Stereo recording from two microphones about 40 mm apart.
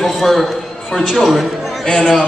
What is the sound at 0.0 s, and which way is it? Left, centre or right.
A man's voice, centre.